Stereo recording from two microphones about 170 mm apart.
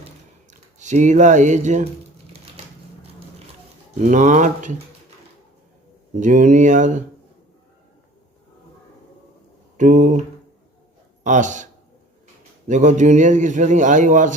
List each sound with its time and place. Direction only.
0.8 s a man's voice: 45° right (ahead or behind)
4.0 s a man's voice: 50° right (ahead or behind)
6.1 s a man's voice: 45° right (ahead or behind)
9.7 s a man's voice: 50° right (ahead or behind)
11.2 s a man's voice: 45° right (ahead or behind)